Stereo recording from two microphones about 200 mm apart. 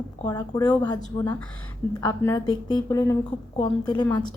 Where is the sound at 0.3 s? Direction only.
20° left (ahead or behind).